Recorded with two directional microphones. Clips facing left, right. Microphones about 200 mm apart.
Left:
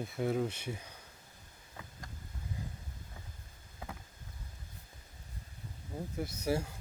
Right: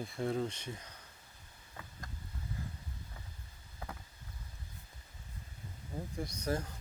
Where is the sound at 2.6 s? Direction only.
15° left (ahead or behind).